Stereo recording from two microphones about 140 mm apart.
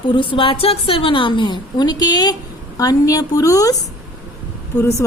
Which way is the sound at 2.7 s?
25° left (ahead or behind).